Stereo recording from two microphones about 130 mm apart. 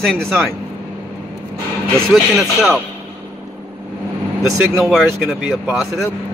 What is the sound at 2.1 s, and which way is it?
Speech, centre (ahead or behind).